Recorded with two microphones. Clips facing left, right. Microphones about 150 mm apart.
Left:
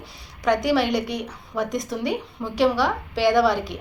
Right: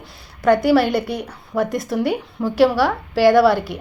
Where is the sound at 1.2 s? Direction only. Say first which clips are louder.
Right 5 dB; 5° right (ahead or behind).